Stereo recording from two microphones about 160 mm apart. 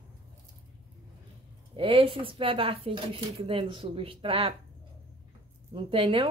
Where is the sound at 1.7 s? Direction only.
35° right (ahead or behind).